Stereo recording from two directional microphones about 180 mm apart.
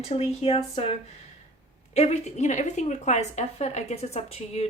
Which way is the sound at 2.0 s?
40° left (ahead or behind).